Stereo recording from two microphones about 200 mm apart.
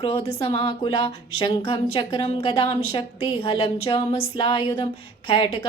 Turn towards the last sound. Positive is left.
turn(degrees=25)  # may be behind; listen again after turning